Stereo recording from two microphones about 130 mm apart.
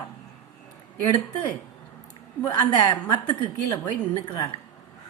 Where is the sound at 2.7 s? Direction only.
35° left (ahead or behind).